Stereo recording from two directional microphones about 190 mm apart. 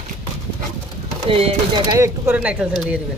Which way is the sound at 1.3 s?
30° right (ahead or behind).